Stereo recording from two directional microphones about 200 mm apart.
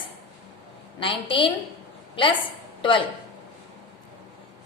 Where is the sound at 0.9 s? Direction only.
25° left (ahead or behind).